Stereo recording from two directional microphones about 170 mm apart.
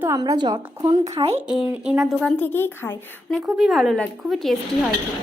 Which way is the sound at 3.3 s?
Centre (ahead or behind).